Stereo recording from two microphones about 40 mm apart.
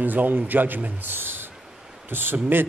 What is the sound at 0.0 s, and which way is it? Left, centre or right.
Speech, right.